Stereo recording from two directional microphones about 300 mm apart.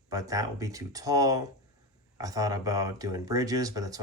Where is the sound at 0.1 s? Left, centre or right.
Centre.